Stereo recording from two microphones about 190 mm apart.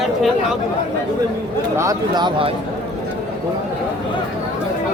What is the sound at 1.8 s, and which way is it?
Speech, 20° right (ahead or behind).